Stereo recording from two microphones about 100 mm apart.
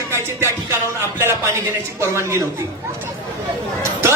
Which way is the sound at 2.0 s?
30° right (ahead or behind).